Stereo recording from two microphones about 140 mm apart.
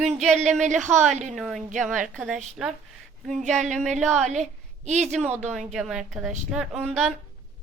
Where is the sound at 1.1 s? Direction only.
55° right (ahead or behind).